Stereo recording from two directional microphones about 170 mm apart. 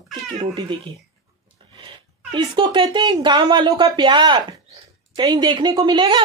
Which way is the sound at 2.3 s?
30° right (ahead or behind).